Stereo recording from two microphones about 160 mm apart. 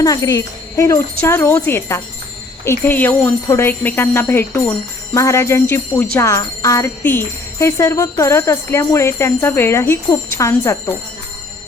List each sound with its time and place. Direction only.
0.0 s speech: 25° left (ahead or behind)
1.2 s jingle bell: 15° left (ahead or behind)